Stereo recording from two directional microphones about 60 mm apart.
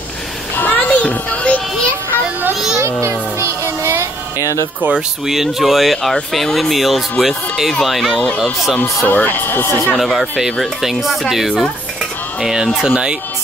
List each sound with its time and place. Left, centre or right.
0.6 s music: left
2.5 s music: centre
2.8 s child singing: right
4.4 s speech: left
4.9 s speech: centre
9.0 s speech: left
9.9 s speech: centre